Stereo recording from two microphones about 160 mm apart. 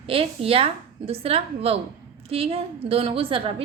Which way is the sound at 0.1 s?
35° right (ahead or behind).